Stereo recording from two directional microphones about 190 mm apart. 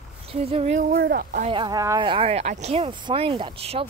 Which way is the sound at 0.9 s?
55° right (ahead or behind).